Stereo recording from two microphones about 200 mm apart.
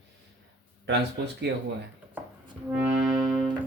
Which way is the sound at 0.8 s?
60° right (ahead or behind).